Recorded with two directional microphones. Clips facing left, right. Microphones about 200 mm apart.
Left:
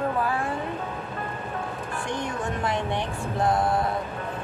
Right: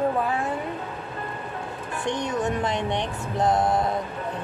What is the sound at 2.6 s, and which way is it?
Speech, 20° right (ahead or behind).